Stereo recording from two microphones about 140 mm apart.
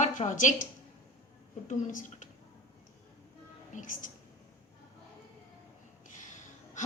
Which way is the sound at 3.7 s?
70° left (ahead or behind).